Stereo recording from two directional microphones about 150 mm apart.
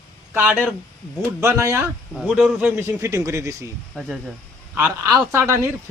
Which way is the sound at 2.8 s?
20° right (ahead or behind).